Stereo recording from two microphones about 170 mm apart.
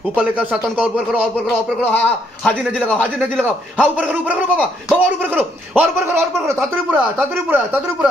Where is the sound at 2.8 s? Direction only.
10° right (ahead or behind).